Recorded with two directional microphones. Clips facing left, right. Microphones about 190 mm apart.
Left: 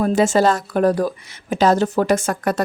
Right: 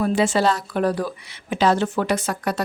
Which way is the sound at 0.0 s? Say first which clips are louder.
Left 3 dB; 45° left (ahead or behind).